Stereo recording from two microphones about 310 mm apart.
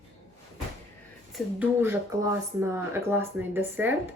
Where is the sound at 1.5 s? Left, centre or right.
Centre.